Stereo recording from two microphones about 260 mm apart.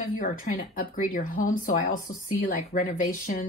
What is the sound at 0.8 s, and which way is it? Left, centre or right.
Speech, left.